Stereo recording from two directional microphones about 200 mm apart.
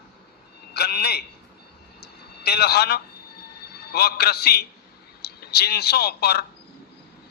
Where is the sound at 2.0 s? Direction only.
55° left (ahead or behind).